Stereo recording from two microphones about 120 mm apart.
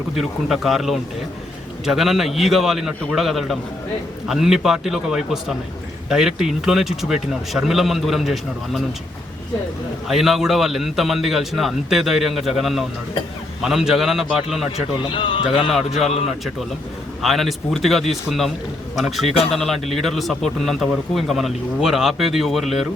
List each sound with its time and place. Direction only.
0.2 s speech: centre (ahead or behind)
10.1 s speech: 5° right (ahead or behind)
15.0 s speech: 45° left (ahead or behind)
17.2 s speech: centre (ahead or behind)